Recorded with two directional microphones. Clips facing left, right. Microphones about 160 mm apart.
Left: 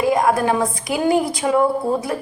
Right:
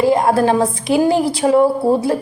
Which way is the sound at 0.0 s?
30° right (ahead or behind).